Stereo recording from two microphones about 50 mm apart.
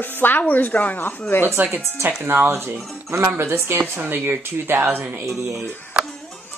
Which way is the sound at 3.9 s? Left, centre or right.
Right.